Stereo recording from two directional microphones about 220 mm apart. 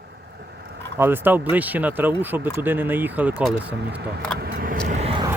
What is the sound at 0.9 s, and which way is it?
Speech, 10° right (ahead or behind).